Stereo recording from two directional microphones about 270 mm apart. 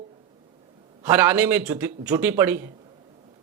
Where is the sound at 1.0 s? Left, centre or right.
Centre.